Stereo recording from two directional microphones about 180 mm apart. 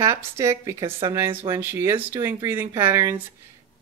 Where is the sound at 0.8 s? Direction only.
30° right (ahead or behind).